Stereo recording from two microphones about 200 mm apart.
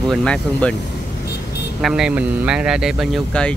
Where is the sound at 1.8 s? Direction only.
Centre (ahead or behind).